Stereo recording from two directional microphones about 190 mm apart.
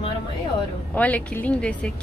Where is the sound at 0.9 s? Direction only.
10° left (ahead or behind).